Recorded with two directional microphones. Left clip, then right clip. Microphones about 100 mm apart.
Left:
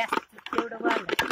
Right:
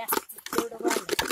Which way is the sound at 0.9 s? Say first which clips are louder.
Left 3 dB; 70° right (ahead or behind).